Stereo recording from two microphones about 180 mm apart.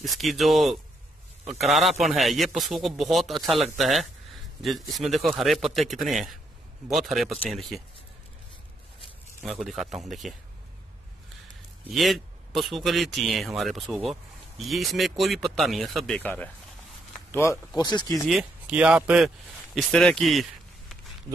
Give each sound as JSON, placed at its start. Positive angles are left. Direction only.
{"t": 0.0, "sound": "a man's voice", "side_deg": 0}
{"t": 9.4, "sound": "a man's voice", "side_deg": 0}
{"t": 11.9, "sound": "a man's voice", "side_deg": 0}
{"t": 18.3, "sound": "a man's voice", "side_deg": -5}